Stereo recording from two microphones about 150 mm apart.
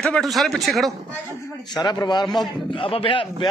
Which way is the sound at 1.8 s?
30° left (ahead or behind).